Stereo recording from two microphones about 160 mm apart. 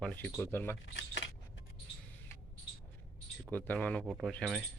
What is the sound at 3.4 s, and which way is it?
A man's voice, 10° left (ahead or behind).